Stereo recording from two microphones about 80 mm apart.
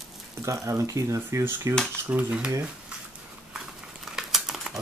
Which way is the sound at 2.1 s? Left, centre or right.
Right.